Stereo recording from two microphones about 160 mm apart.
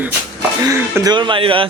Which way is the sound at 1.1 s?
30° right (ahead or behind).